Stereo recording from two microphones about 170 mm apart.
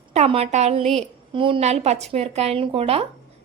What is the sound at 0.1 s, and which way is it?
Speech, 40° right (ahead or behind).